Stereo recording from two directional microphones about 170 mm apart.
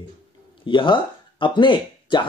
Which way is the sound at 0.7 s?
30° left (ahead or behind).